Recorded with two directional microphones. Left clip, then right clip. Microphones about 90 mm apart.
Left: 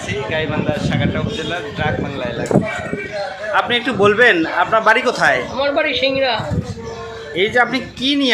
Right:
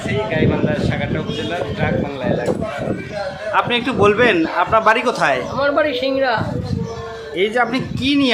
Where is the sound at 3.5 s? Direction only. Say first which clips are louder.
Left 1 dB; 20° right (ahead or behind).